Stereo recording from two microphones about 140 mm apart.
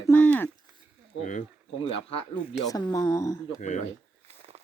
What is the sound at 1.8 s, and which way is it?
Speech, 40° left (ahead or behind).